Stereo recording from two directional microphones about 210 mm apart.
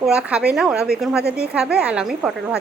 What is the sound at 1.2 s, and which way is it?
Speech, 50° right (ahead or behind).